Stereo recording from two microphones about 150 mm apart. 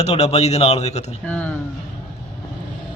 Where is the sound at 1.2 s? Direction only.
10° left (ahead or behind).